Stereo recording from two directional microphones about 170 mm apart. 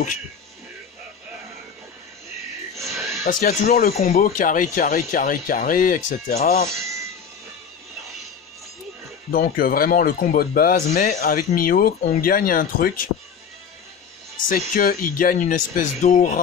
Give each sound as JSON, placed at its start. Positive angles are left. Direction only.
{"t": 3.3, "sound": "speech", "side_deg": 55}
{"t": 3.9, "sound": "speech", "side_deg": 40}
{"t": 4.2, "sound": "speech", "side_deg": 50}
{"t": 6.7, "sound": "music", "side_deg": -15}
{"t": 9.3, "sound": "speech", "side_deg": 55}
{"t": 14.5, "sound": "speech", "side_deg": 55}